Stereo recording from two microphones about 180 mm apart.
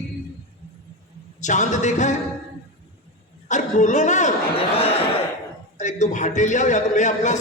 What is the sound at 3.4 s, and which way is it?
Speech, 40° left (ahead or behind).